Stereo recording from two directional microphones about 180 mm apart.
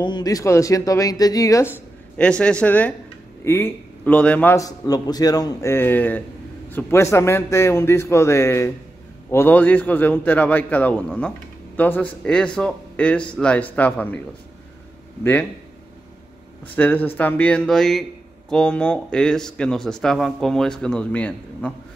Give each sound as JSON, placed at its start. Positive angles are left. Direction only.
{"t": 0.0, "sound": "speech", "side_deg": 25}
{"t": 2.1, "sound": "a man's voice", "side_deg": 5}
{"t": 16.6, "sound": "a man's voice", "side_deg": 10}